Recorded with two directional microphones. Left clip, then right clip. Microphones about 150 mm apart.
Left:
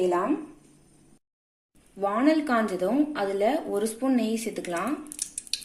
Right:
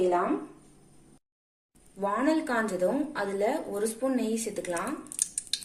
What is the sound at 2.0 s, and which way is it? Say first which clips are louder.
A woman's voice: left 3 dB; 70° left (ahead or behind).